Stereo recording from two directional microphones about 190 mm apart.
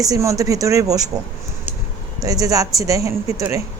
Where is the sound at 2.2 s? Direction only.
20° right (ahead or behind).